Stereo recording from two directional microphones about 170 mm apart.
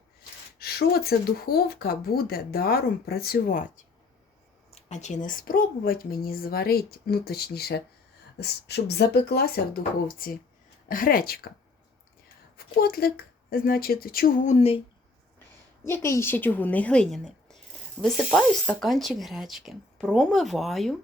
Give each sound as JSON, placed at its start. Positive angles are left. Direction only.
{"t": 0.6, "sound": "speech", "side_deg": 65}
{"t": 4.7, "sound": "speech", "side_deg": 45}
{"t": 12.5, "sound": "speech", "side_deg": 65}
{"t": 15.8, "sound": "a woman's voice", "side_deg": 15}